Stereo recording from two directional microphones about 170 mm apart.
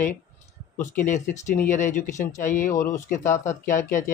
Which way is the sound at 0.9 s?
45° left (ahead or behind).